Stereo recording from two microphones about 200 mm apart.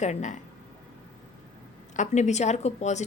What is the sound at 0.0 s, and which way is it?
Speech, 35° left (ahead or behind).